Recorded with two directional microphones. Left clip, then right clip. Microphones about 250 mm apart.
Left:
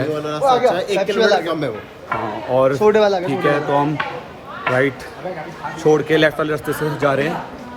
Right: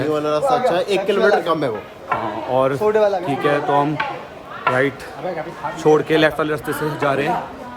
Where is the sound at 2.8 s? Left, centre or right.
Left.